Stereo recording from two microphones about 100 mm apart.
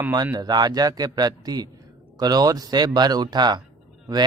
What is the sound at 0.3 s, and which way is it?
A man's voice, 45° right (ahead or behind).